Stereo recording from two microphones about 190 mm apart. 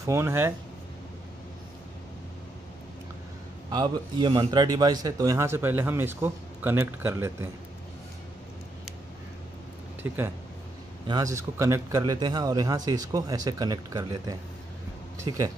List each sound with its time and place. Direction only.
0.0 s a man's voice: 15° right (ahead or behind)
3.7 s a man's voice: 20° right (ahead or behind)
11.1 s a man's voice: 20° right (ahead or behind)